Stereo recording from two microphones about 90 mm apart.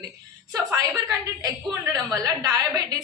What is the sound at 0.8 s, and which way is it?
A woman's voice, 40° right (ahead or behind).